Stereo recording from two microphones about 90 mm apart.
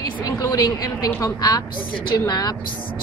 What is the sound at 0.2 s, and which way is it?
A woman's voice, 45° left (ahead or behind).